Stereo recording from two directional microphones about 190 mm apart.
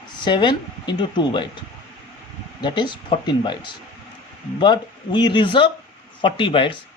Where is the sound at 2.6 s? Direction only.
25° left (ahead or behind).